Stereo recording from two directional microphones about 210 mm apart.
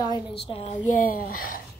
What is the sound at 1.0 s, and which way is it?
Speech, 40° left (ahead or behind).